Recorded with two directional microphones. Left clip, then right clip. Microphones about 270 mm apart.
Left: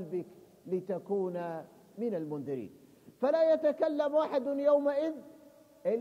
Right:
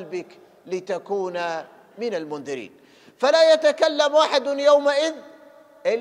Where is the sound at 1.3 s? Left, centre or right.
Centre.